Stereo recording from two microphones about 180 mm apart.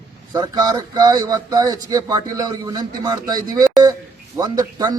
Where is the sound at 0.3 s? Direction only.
20° right (ahead or behind).